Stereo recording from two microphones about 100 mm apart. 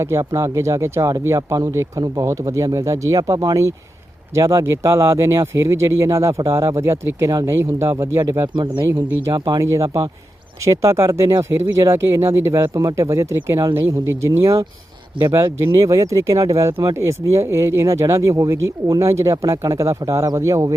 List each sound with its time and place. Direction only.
0.0 s speech: 30° right (ahead or behind)
8.5 s speech: 50° right (ahead or behind)
9.6 s speech: 30° right (ahead or behind)